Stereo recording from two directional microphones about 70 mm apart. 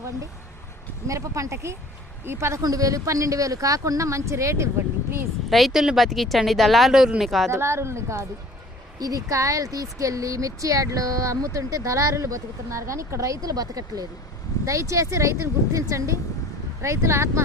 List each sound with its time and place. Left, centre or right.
1.0 s speech: right
2.6 s speech: right
5.5 s speech: centre
7.5 s speech: right
9.0 s speech: right
14.6 s speech: right